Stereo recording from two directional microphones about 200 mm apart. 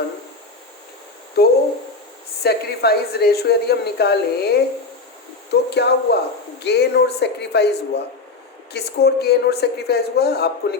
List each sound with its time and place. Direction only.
1.4 s a woman's voice: 50° left (ahead or behind)